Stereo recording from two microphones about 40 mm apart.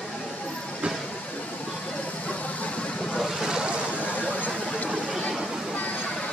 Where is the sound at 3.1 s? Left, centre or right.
Centre.